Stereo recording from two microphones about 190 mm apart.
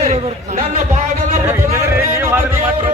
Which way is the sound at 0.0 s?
35° right (ahead or behind).